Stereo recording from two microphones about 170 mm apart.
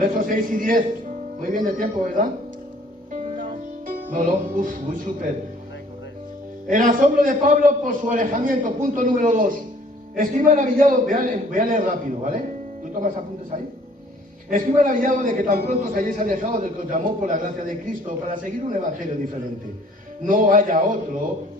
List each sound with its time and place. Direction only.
0.0 s a man's voice: 55° right (ahead or behind)
3.1 s music: 50° right (ahead or behind)
6.7 s a man's voice: 50° right (ahead or behind)
14.5 s a man's voice: 50° right (ahead or behind)
20.2 s a man's voice: 50° right (ahead or behind)